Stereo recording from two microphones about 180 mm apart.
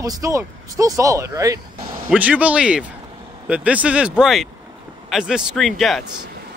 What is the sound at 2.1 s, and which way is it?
Speech, 5° right (ahead or behind).